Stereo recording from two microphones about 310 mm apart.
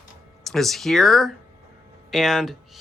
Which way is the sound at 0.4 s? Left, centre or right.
Centre.